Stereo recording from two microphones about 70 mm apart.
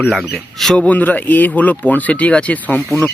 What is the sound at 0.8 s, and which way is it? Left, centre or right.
Speech, left.